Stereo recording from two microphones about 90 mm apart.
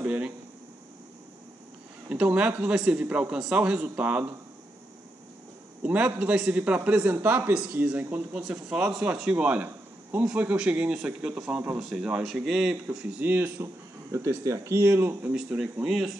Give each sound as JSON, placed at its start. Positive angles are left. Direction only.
{"t": 0.0, "sound": "speech", "side_deg": -15}
{"t": 2.0, "sound": "a man's voice", "side_deg": -15}
{"t": 5.8, "sound": "a man's voice", "side_deg": -15}
{"t": 7.5, "sound": "a man's voice", "side_deg": -15}
{"t": 14.1, "sound": "speech", "side_deg": -35}
{"t": 15.3, "sound": "a man's voice", "side_deg": -10}